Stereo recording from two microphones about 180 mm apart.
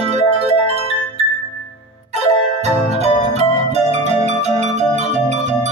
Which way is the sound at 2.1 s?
35° right (ahead or behind).